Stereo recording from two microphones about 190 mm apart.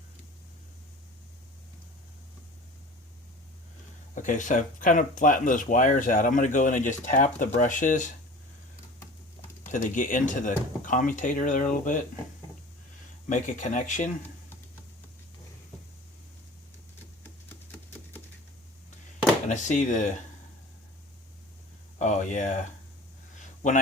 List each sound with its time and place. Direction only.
4.1 s speech: 40° left (ahead or behind)
9.6 s speech: 40° left (ahead or behind)
13.2 s speech: 40° left (ahead or behind)
17.2 s a sound: 10° left (ahead or behind)
19.5 s speech: 40° left (ahead or behind)
21.9 s speech: 40° left (ahead or behind)